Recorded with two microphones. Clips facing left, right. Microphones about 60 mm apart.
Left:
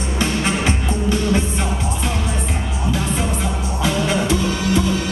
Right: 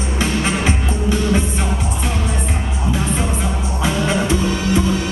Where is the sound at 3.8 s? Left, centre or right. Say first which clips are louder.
Right 1 dB; right.